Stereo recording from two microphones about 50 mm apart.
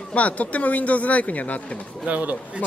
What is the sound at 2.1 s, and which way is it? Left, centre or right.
Speech, right.